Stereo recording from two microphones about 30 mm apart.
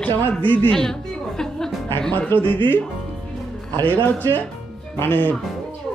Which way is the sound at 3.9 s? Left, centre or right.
Left.